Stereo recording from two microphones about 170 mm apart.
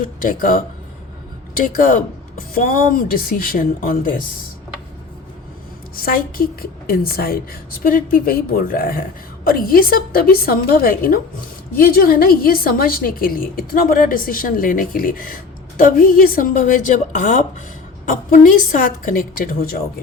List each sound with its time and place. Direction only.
0.2 s a woman's voice: 55° left (ahead or behind)
6.0 s a woman's voice: 60° left (ahead or behind)